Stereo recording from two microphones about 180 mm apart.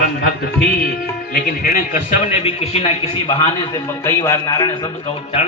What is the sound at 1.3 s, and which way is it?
A man's voice, 55° left (ahead or behind).